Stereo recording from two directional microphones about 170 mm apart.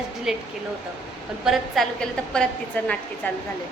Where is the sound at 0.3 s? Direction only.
5° right (ahead or behind).